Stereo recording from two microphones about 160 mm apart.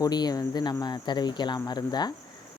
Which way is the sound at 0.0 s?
25° left (ahead or behind).